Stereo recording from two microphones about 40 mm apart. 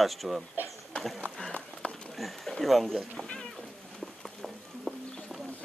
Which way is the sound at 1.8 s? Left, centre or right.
Left.